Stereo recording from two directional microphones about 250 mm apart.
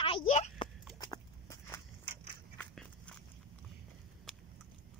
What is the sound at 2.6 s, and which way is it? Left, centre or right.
Biting, centre.